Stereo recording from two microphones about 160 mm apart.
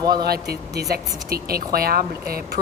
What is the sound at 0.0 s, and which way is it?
Speech, 25° right (ahead or behind).